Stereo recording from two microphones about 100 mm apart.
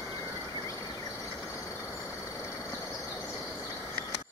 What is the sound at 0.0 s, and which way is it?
Vehicle, 35° left (ahead or behind).